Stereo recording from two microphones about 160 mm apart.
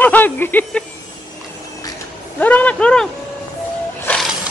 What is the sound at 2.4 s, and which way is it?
Speech, 10° left (ahead or behind).